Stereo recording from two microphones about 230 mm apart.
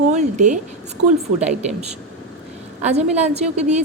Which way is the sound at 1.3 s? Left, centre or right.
Centre.